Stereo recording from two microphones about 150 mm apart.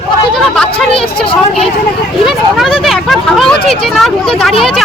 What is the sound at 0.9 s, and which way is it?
Speech, 40° left (ahead or behind).